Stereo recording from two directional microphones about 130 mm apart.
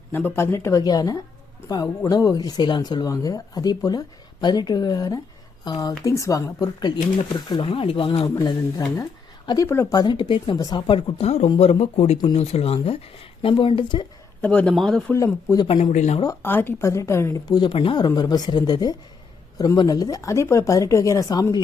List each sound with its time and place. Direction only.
0.1 s speech: 15° left (ahead or behind); by 8.5 s 35° left (ahead or behind)
9.9 s speech: 35° left (ahead or behind)
11.6 s speech: 50° left (ahead or behind)
14.4 s speech: 10° left (ahead or behind)
15.1 s speech: 20° left (ahead or behind)
15.6 s speech: 45° left (ahead or behind)
15.9 s speech: 65° left (ahead or behind)
16.2 s speech: 15° left (ahead or behind)
17.7 s speech: 40° left (ahead or behind)